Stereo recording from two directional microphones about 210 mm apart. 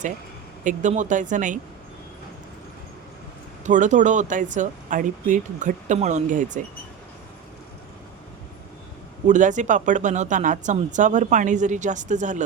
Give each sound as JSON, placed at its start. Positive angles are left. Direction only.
{"t": 0.6, "sound": "speech", "side_deg": -35}
{"t": 3.6, "sound": "speech", "side_deg": -35}
{"t": 9.2, "sound": "speech", "side_deg": -35}